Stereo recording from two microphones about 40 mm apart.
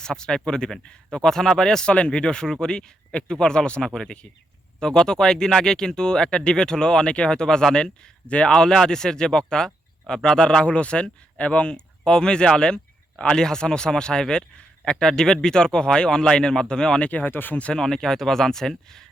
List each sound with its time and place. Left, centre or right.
0.0 s speech: centre
1.9 s speech: left
3.1 s speech: left
8.3 s speech: left
8.5 s speech: centre; by 11.7 s left
11.7 s speech: centre
17.1 s speech: left
17.7 s speech: centre